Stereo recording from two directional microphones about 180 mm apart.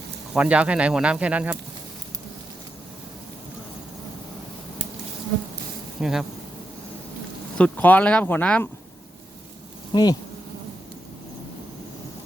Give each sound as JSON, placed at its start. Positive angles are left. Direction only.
{"t": 0.3, "sound": "speech", "side_deg": -5}
{"t": 6.0, "sound": "speech", "side_deg": 0}
{"t": 7.6, "sound": "speech", "side_deg": 10}
{"t": 9.9, "sound": "insect", "side_deg": 20}